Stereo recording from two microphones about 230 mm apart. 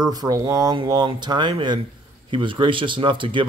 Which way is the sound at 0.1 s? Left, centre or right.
Centre.